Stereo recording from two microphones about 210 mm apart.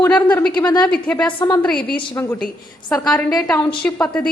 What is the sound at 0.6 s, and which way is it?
Speech, 20° left (ahead or behind).